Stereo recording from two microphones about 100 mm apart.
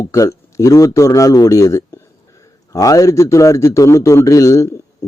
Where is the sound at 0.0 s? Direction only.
30° left (ahead or behind).